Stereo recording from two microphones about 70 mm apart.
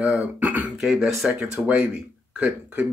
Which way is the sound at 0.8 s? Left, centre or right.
Centre.